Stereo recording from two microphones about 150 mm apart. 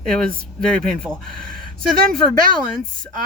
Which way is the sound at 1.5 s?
75° right (ahead or behind).